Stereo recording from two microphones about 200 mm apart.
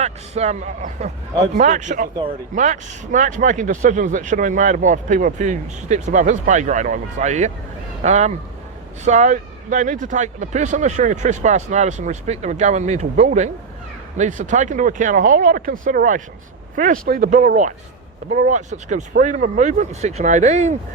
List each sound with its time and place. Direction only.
0.0 s speech: 35° right (ahead or behind)